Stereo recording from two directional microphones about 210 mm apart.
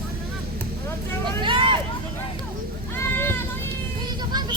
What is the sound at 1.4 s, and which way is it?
Hubbub, 25° right (ahead or behind).